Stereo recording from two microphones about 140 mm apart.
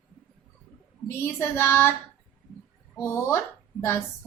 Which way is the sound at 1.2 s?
15° left (ahead or behind).